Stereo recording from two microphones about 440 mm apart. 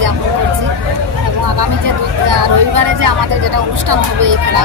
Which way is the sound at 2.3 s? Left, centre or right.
Right.